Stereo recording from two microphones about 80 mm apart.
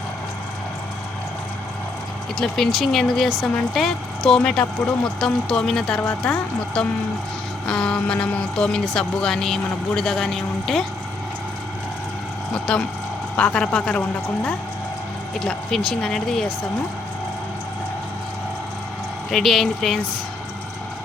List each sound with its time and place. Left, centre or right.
2.4 s speech: centre
12.7 s speech: centre
19.3 s speech: centre